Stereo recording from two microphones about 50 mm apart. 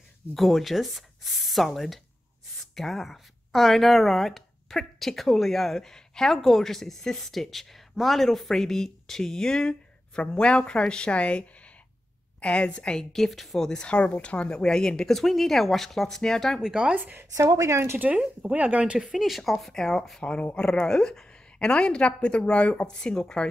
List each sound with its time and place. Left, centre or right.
0.3 s speech: centre
13.1 s speech: centre
13.8 s a woman's voice: left; by 16.6 s centre
16.6 s speech: centre
16.9 s speech: right
17.3 s speech: right
18.1 s speech: centre
18.5 s speech: right
18.9 s speech: centre
19.6 s a woman's voice: centre